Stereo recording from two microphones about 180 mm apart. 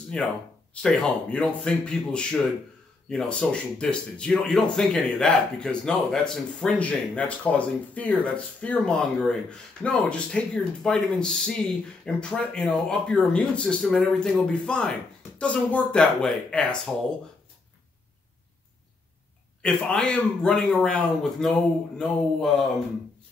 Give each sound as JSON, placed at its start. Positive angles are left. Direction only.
{"t": 0.1, "sound": "speech", "side_deg": 5}
{"t": 19.6, "sound": "speech", "side_deg": 5}